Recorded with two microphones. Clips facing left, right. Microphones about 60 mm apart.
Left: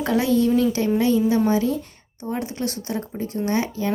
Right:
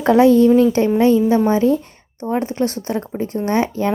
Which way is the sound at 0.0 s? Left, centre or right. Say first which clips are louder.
Right 8 dB; right.